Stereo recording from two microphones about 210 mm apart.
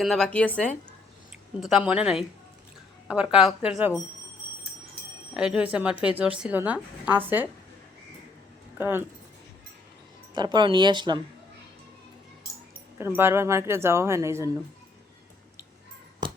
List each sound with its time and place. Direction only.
0.0 s a woman's voice: centre (ahead or behind)
1.6 s a woman's voice: 5° right (ahead or behind)
5.3 s a woman's voice: 5° right (ahead or behind)
8.8 s speech: 10° right (ahead or behind)
10.3 s speech: 20° right (ahead or behind)
13.0 s speech: 10° right (ahead or behind)